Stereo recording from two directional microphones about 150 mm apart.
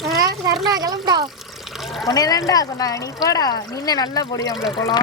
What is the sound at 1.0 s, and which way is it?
Water, 30° right (ahead or behind).